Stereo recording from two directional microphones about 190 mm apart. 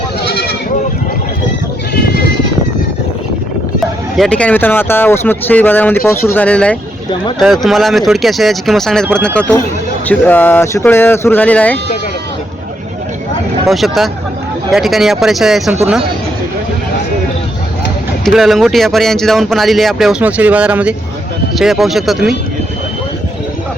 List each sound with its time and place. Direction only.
4.2 s speech: 5° left (ahead or behind)
13.7 s speech: centre (ahead or behind)
18.3 s speech: centre (ahead or behind)